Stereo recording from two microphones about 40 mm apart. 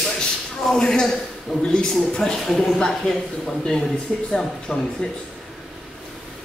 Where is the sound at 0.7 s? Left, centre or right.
Centre.